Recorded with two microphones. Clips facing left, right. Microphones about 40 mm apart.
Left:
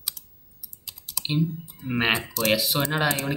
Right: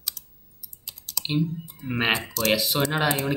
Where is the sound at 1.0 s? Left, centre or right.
Centre.